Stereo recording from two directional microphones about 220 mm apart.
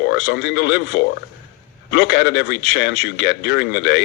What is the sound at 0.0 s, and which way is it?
A man's voice, 50° left (ahead or behind).